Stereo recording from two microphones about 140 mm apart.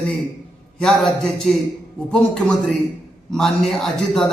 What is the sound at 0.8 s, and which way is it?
A man's voice, 5° left (ahead or behind).